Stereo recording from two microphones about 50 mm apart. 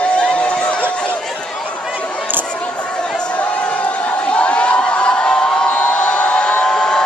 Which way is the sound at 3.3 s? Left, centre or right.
Left.